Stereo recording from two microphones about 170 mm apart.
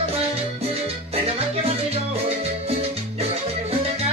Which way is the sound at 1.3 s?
35° right (ahead or behind).